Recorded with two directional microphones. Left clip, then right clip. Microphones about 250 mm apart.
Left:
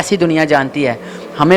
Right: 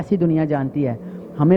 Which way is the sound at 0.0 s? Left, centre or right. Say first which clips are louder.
Left 7 dB; centre.